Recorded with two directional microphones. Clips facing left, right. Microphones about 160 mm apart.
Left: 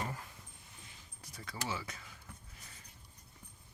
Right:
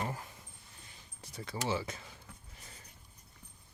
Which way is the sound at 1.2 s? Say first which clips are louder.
Right 5 dB; 25° right (ahead or behind).